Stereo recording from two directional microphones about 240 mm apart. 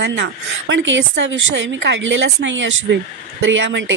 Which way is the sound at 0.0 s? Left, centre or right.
Right.